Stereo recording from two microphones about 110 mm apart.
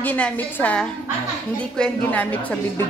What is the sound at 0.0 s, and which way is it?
A woman's voice, 15° left (ahead or behind).